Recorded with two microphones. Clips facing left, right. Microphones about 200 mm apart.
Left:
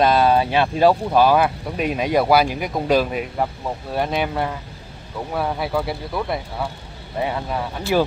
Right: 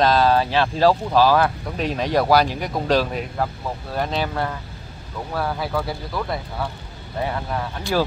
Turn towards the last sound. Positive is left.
turn(degrees=10)  # may be behind; listen again after turning